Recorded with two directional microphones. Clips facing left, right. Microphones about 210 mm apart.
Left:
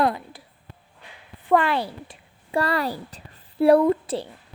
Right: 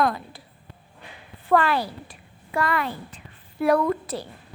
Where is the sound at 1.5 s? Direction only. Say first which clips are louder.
Even; 20° left (ahead or behind).